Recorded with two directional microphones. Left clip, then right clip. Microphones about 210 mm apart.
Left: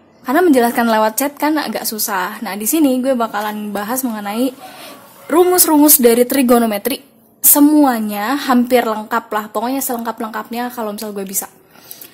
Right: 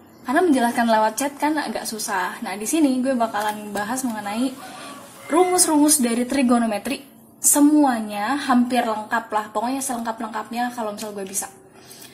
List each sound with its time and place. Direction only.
0.2 s speech: 40° left (ahead or behind)